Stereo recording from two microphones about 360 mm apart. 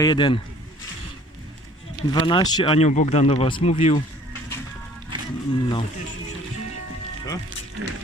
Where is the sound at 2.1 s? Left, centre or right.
Centre.